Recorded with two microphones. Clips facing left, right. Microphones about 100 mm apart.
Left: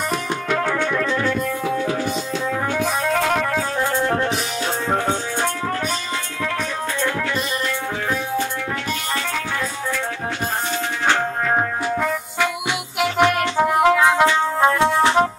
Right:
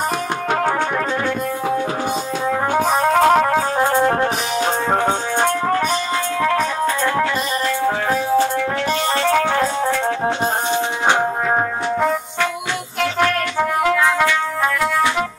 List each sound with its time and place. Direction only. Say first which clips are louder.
0.5 s music: right 2 dB; 45° right (ahead or behind)
2.7 s music: right 6 dB; 45° right (ahead or behind)
9.2 s music: right 9 dB; 65° right (ahead or behind)
10.7 s music: right 1 dB; 15° right (ahead or behind)
13.0 s music: left 1 dB; 10° left (ahead or behind); by 15.2 s 30° left (ahead or behind)